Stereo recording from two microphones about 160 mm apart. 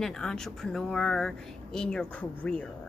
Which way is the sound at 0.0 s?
5° left (ahead or behind).